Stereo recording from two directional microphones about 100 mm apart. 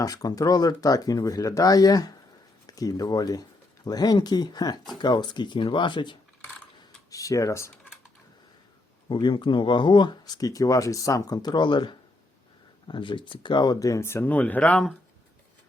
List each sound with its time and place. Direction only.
0.0 s speech: 35° left (ahead or behind); by 6.1 s 55° left (ahead or behind)
7.1 s speech: 35° left (ahead or behind)
9.1 s speech: 50° left (ahead or behind); by 14.8 s 15° left (ahead or behind)